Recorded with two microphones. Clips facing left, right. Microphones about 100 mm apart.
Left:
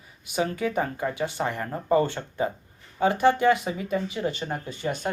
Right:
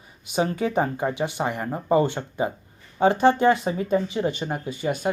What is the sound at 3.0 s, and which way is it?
Speech, 30° right (ahead or behind).